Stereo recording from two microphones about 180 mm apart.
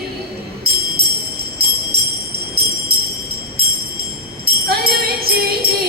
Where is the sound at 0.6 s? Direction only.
60° right (ahead or behind).